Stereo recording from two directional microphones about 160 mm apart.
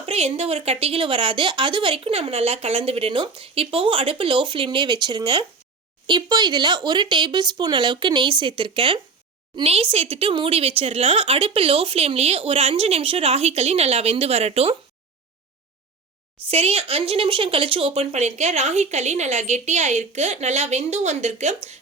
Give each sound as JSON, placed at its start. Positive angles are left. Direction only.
{"t": 0.0, "sound": "speech", "side_deg": -40}
{"t": 16.5, "sound": "speech", "side_deg": -40}